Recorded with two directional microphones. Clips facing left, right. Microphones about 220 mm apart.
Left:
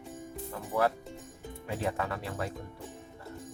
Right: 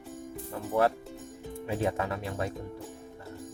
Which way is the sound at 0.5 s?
25° right (ahead or behind).